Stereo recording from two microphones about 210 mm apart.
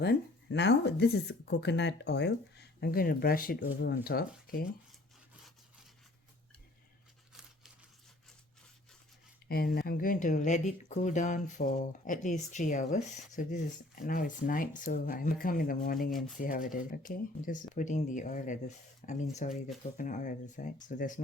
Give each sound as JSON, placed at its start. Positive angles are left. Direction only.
{"t": 0.0, "sound": "speech", "side_deg": 55}
{"t": 9.5, "sound": "speech", "side_deg": 45}
{"t": 16.0, "sound": "speech", "side_deg": 0}
{"t": 16.4, "sound": "speech", "side_deg": 40}